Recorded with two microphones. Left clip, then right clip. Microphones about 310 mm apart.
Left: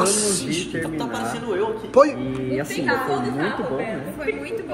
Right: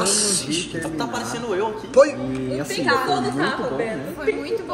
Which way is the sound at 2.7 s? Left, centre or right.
Right.